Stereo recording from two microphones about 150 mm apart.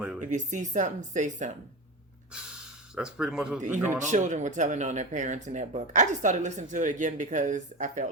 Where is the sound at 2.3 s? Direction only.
5° right (ahead or behind).